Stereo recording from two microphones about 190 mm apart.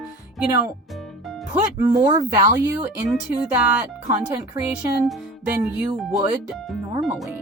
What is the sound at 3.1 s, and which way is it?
Speech, 5° right (ahead or behind).